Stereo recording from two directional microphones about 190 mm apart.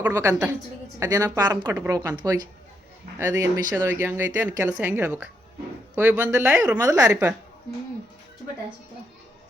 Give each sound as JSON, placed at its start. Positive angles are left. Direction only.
{"t": 0.0, "sound": "speech", "side_deg": -15}
{"t": 3.8, "sound": "speech", "side_deg": -10}
{"t": 6.8, "sound": "speech", "side_deg": -20}
{"t": 7.1, "sound": "speech", "side_deg": -10}